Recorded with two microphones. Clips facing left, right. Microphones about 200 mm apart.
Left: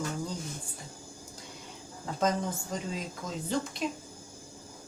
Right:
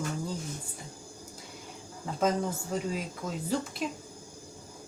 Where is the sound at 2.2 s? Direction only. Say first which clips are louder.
Right 1 dB; 5° right (ahead or behind).